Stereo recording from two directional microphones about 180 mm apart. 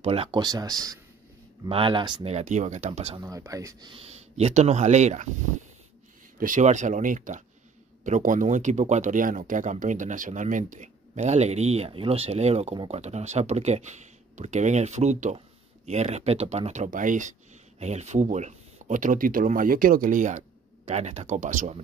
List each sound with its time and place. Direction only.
0.0 s speech: 30° right (ahead or behind)
3.2 s speech: 20° right (ahead or behind)
3.9 s speech: 35° right (ahead or behind)
6.4 s speech: 45° right (ahead or behind)